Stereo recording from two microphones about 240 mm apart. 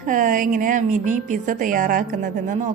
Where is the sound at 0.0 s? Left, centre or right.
Right.